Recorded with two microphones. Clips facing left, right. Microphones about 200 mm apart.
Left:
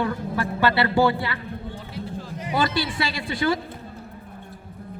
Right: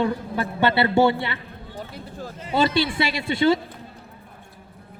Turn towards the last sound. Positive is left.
turn(degrees=-25)  # may be behind; listen again after turning